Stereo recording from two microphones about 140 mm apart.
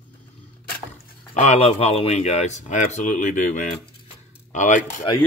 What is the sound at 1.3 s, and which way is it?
Speech, 55° left (ahead or behind).